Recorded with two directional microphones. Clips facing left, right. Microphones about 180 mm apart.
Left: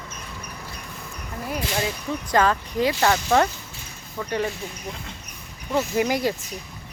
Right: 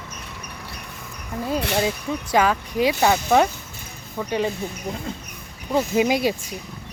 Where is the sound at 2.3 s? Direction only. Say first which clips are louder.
Right 1 dB; 10° right (ahead or behind).